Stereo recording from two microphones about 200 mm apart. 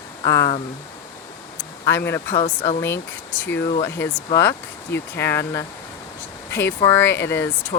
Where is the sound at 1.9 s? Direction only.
10° left (ahead or behind).